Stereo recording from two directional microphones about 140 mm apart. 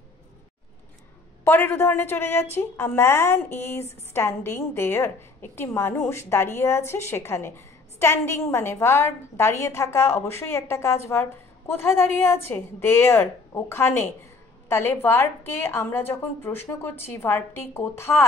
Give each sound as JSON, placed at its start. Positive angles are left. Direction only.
{"t": 1.4, "sound": "a woman's voice", "side_deg": 15}